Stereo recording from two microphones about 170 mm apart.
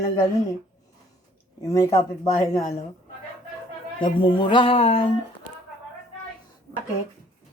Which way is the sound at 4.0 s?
30° left (ahead or behind).